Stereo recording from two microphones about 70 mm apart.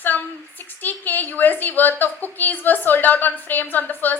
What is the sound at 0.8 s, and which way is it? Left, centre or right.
A woman's voice, left.